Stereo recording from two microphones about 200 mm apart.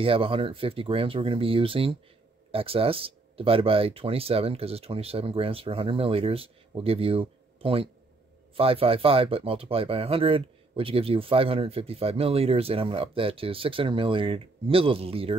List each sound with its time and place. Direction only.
0.0 s speech: 25° right (ahead or behind)